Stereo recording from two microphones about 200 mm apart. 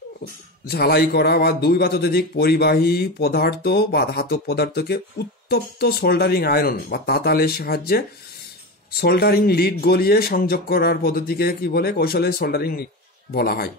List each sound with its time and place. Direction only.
0.7 s a man's voice: 50° left (ahead or behind)